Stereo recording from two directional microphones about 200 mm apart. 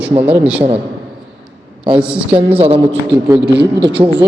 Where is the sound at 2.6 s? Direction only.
30° right (ahead or behind).